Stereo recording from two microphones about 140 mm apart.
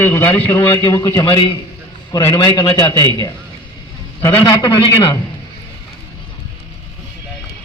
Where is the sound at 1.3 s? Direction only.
40° left (ahead or behind).